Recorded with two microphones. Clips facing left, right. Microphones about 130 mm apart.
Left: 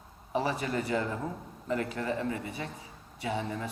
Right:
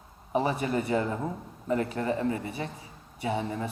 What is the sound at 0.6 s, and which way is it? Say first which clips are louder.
A woman's voice: right 3 dB; 25° right (ahead or behind).